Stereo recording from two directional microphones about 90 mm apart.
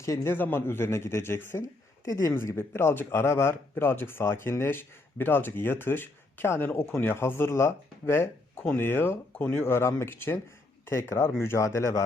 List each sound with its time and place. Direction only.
0.0 s speech: 35° left (ahead or behind)
0.3 s speech: 25° left (ahead or behind)
2.0 s speech: 35° left (ahead or behind)